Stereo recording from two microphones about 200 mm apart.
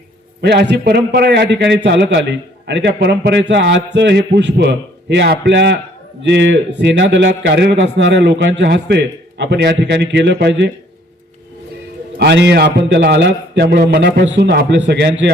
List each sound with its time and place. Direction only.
0.4 s a man's voice: 60° right (ahead or behind)
12.2 s a man's voice: 55° right (ahead or behind)